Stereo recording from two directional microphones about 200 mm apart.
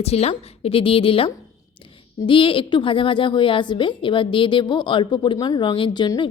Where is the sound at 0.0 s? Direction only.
30° left (ahead or behind).